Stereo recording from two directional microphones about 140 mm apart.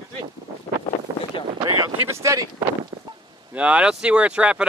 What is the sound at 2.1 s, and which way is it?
Speech, 20° right (ahead or behind).